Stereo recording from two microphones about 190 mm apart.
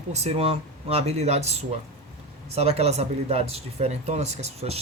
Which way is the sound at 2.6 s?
35° right (ahead or behind).